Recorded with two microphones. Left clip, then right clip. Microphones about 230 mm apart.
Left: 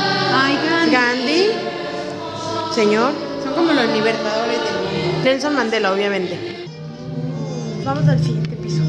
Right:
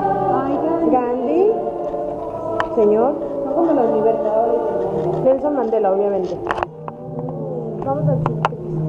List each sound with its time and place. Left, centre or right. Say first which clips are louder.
0.3 s music: left 2 dB; left
2.7 s speech: right 1 dB; left
3.7 s a sound: right 2 dB; left
5.2 s a woman's voice: right 1 dB; left